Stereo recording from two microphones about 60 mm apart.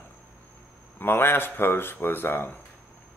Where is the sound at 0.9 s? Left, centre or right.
Left.